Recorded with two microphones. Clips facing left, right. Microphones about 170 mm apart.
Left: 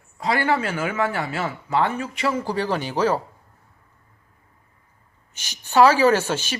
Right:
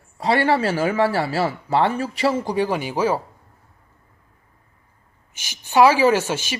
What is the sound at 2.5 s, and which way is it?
Speech, 15° right (ahead or behind).